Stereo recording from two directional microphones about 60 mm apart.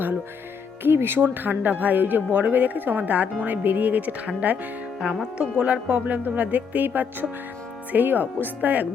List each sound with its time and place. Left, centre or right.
0.8 s speech: right